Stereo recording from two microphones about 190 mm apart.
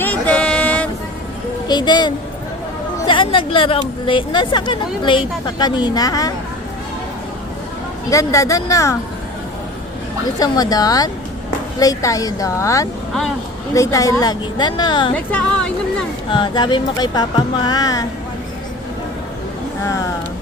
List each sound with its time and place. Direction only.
0.0 s a sound: 10° left (ahead or behind)
1.6 s speech: 20° left (ahead or behind)
8.1 s a woman's voice: 15° left (ahead or behind)
10.4 s a woman's voice: 20° left (ahead or behind)
15.1 s a woman's voice: 5° left (ahead or behind)
16.3 s speech: 25° left (ahead or behind)